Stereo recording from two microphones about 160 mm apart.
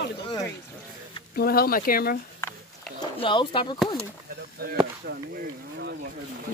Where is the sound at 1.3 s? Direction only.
70° left (ahead or behind).